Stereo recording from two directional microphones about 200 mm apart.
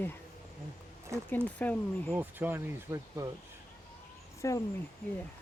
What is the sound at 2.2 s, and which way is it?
Speech, 10° right (ahead or behind).